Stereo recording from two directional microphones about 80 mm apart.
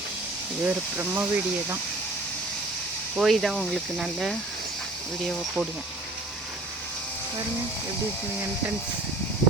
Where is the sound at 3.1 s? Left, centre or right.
Centre.